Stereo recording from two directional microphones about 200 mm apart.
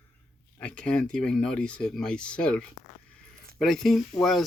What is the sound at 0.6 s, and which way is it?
Speech, 5° left (ahead or behind).